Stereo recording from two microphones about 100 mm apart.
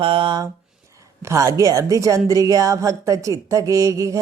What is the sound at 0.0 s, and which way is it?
Speech, 60° right (ahead or behind).